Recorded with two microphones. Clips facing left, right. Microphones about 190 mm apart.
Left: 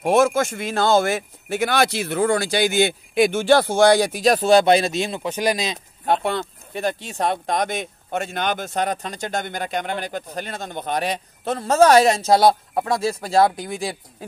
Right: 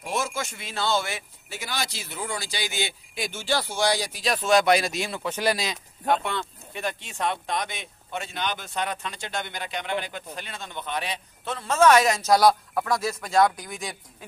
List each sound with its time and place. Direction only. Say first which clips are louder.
0.0 s speech: left 12 dB; 55° left (ahead or behind); by 5.8 s 20° left (ahead or behind)
6.0 s speech: left 4 dB; 35° left (ahead or behind)